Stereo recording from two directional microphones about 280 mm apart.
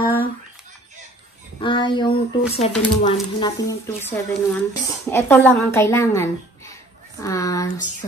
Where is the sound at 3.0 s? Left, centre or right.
Centre.